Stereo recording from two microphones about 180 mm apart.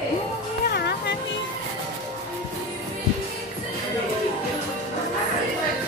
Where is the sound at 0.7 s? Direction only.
65° left (ahead or behind).